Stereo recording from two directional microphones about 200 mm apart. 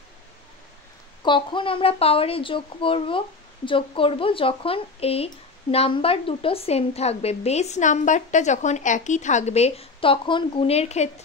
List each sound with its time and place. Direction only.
1.2 s a woman's voice: 25° left (ahead or behind)